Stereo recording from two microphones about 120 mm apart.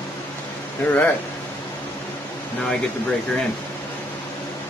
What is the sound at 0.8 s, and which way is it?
Speech, 10° left (ahead or behind).